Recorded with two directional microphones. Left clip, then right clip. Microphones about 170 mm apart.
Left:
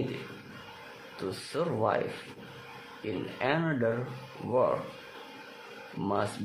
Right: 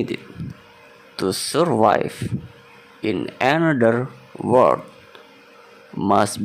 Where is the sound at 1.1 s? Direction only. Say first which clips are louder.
Right 14 dB; 55° right (ahead or behind).